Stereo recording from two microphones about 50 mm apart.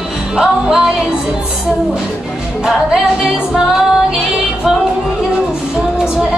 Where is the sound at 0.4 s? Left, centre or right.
Centre.